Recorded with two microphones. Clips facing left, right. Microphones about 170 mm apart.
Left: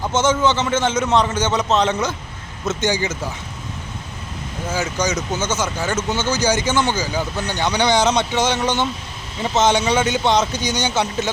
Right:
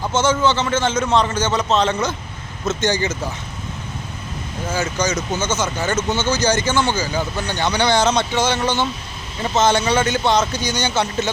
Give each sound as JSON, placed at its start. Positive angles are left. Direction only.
{"t": 0.1, "sound": "a man's voice", "side_deg": 20}
{"t": 4.7, "sound": "speech", "side_deg": 15}